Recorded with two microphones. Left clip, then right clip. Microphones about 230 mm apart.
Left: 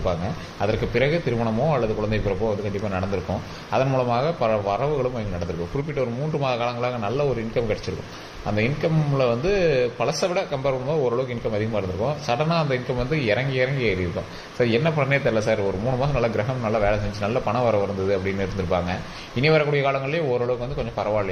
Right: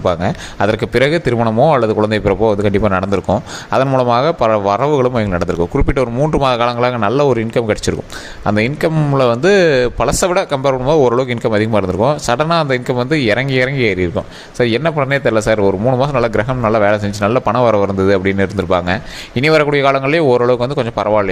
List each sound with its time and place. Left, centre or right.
0.6 s a man's voice: right